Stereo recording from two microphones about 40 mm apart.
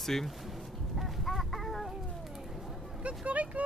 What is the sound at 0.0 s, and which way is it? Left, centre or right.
Speech, centre.